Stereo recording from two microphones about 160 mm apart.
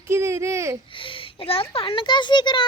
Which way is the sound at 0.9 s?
30° left (ahead or behind).